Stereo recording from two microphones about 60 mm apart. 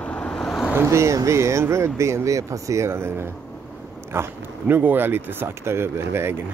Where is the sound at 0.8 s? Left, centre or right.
Right.